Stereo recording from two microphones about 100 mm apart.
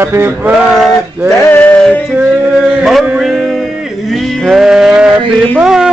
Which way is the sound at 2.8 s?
Centre (ahead or behind).